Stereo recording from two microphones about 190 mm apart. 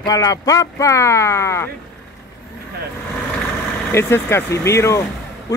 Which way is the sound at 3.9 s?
15° left (ahead or behind).